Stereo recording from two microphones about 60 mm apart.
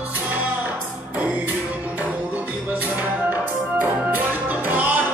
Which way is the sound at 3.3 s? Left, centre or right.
Right.